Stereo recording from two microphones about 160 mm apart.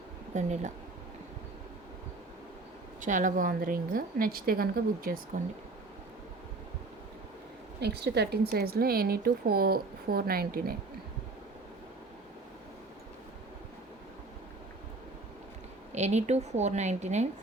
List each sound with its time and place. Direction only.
0.3 s a woman's voice: 45° right (ahead or behind)
3.0 s a woman's voice: 50° right (ahead or behind)
7.8 s a woman's voice: 90° right; by 10.8 s 70° right (ahead or behind)
15.9 s a woman's voice: 45° right (ahead or behind)